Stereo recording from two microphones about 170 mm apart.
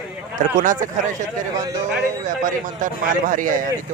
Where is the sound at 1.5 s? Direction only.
20° right (ahead or behind).